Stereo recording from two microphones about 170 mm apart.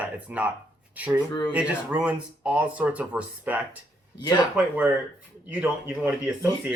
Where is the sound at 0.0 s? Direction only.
10° right (ahead or behind).